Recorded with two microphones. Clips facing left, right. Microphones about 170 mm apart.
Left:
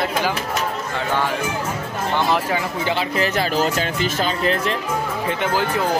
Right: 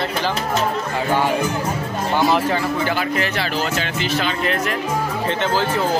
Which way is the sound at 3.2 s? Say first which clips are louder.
Left 2 dB; 40° left (ahead or behind).